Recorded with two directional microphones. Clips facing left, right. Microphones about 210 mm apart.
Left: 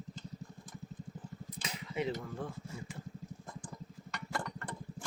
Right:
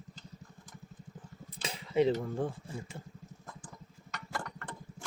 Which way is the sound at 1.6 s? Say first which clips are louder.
Right 9 dB; 30° right (ahead or behind).